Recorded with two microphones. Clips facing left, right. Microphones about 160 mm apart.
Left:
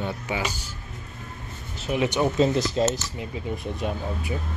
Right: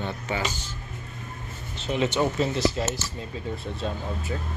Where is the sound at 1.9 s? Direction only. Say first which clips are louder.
Left 1 dB; 15° left (ahead or behind).